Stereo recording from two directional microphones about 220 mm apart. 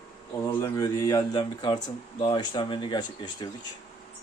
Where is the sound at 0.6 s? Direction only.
15° left (ahead or behind).